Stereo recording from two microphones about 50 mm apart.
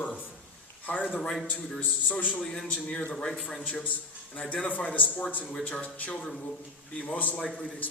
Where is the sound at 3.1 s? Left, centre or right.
Centre.